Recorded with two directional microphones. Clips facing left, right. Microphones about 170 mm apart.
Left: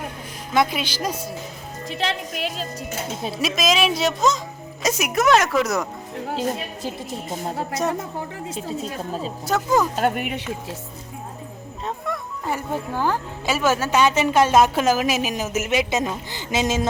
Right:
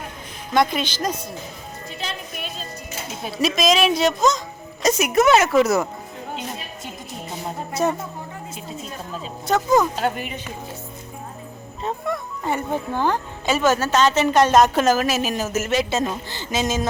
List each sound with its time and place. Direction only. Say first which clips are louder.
0.5 s speech: right 1 dB; 5° left (ahead or behind)
1.9 s a woman's voice: left 7 dB; 80° left
3.3 s a woman's voice: right 3 dB; centre (ahead or behind)
7.7 s a woman's voice: right 4 dB; 5° right (ahead or behind)
9.5 s a woman's voice: right 2 dB; 5° left (ahead or behind)
9.9 s speech: left 2 dB; 55° left (ahead or behind)
11.8 s speech: right 3 dB; centre (ahead or behind); by 16.8 s 25° left (ahead or behind)